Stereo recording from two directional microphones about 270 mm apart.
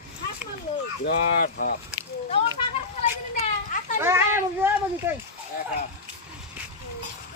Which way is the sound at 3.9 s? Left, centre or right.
Centre.